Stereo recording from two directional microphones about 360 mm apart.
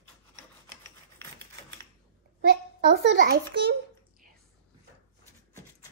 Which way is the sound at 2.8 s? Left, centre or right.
Right.